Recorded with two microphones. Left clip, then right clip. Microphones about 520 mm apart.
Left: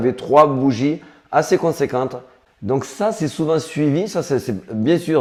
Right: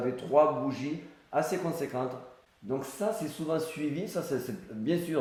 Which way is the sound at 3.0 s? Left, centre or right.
Left.